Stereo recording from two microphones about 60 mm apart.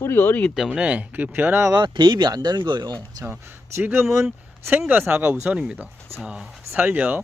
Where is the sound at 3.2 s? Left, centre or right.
Right.